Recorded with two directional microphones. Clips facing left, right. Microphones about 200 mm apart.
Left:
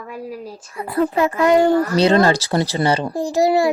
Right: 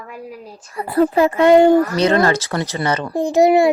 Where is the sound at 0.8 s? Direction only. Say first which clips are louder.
Right 3 dB; 35° right (ahead or behind).